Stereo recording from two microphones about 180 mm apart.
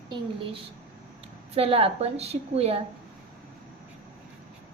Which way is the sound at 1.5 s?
30° right (ahead or behind).